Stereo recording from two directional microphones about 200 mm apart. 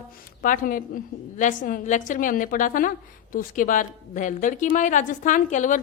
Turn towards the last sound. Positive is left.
turn(degrees=40)  # may be behind; listen again after turning